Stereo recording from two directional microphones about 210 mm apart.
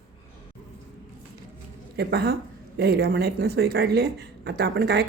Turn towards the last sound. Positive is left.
turn(degrees=-50)  # may be behind; listen again after turning